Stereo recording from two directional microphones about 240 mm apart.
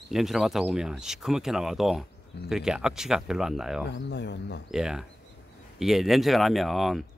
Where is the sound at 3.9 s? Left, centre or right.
Left.